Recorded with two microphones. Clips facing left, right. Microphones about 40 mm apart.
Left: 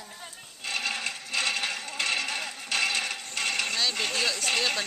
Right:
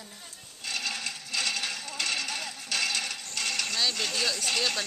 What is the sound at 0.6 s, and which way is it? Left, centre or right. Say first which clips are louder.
Coin: left 3 dB; centre.